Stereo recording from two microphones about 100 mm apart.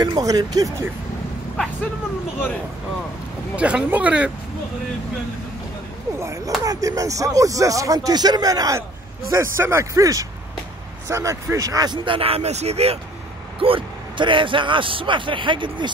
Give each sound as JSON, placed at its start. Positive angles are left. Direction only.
{"t": 0.0, "sound": "speech", "side_deg": -40}
{"t": 3.5, "sound": "speech", "side_deg": -10}
{"t": 6.1, "sound": "a child's voice", "side_deg": -30}
{"t": 9.3, "sound": "speech", "side_deg": -25}
{"t": 13.6, "sound": "speech", "side_deg": -60}